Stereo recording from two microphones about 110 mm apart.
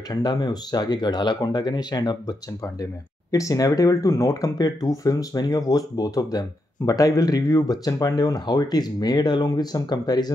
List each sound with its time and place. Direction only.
0.1 s speech: 40° left (ahead or behind)